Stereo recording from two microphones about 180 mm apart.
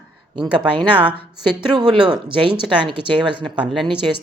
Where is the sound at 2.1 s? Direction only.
25° right (ahead or behind).